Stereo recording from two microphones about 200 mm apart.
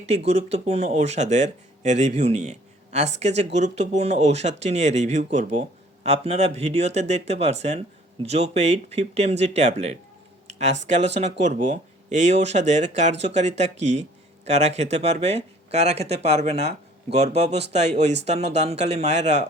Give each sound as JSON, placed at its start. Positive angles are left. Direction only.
{"t": 0.3, "sound": "speech", "side_deg": -30}
{"t": 10.4, "sound": "a sound", "side_deg": -35}
{"t": 10.8, "sound": "speech", "side_deg": -35}